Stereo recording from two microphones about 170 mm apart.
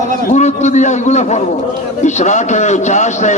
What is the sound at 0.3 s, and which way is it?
A man's voice, 45° left (ahead or behind).